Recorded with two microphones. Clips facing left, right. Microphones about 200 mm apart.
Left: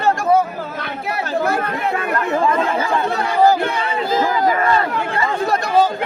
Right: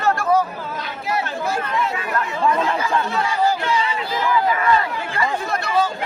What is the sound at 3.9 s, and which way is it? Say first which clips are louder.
Speech: left 3 dB; 45° left (ahead or behind).